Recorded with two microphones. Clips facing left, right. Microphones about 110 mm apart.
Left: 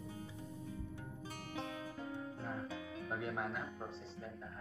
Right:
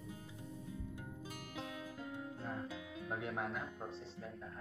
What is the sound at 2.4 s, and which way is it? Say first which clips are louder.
Music: left 1 dB; centre (ahead or behind).